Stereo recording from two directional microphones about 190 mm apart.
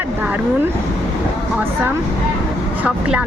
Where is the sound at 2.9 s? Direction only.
5° right (ahead or behind).